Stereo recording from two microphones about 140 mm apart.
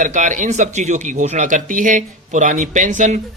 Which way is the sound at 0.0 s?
60° right (ahead or behind).